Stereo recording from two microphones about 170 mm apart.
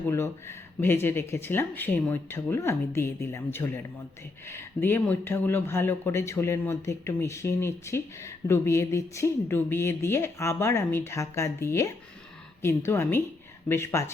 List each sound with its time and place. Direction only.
0.1 s speech: 15° left (ahead or behind)